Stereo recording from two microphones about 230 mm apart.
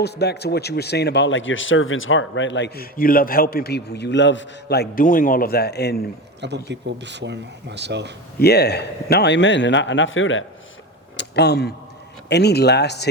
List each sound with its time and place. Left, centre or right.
0.0 s a man's voice: left
6.7 s speech: right
8.4 s a man's voice: left
11.2 s a man's voice: left